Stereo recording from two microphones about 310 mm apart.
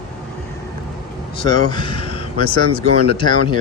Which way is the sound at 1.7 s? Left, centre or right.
Centre.